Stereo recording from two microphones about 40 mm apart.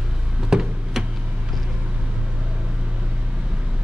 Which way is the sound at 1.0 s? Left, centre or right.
Centre.